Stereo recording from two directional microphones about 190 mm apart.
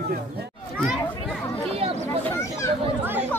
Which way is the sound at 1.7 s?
35° right (ahead or behind).